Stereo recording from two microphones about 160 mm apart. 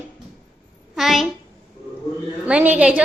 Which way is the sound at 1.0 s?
Centre (ahead or behind).